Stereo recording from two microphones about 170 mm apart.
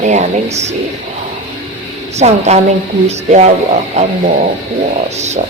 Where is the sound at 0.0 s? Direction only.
45° right (ahead or behind).